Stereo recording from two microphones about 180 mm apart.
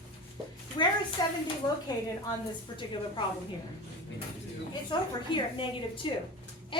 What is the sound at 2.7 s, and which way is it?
Speech, 25° left (ahead or behind).